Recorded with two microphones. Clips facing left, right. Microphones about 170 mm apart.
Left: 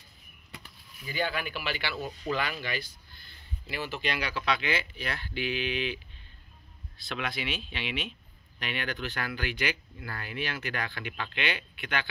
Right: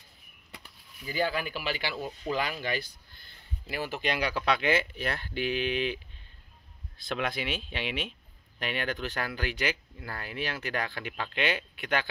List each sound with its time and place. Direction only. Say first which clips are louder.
1.0 s speech: right 2 dB; 35° right (ahead or behind)
2.0 s speech: even; 15° right (ahead or behind)
2.4 s speech: right 2 dB; 40° right (ahead or behind)
7.0 s speech: right 3 dB; 45° right (ahead or behind)